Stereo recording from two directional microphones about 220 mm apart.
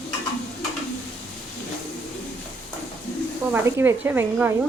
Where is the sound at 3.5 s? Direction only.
10° right (ahead or behind).